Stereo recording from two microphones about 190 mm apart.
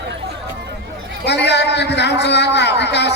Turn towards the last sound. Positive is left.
turn(degrees=65)  # may be behind; listen again after turning